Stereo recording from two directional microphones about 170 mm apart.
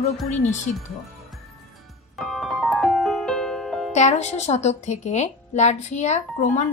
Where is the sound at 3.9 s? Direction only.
40° left (ahead or behind).